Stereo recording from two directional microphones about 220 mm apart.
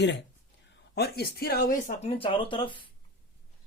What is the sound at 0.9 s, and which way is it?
Speech, 45° left (ahead or behind).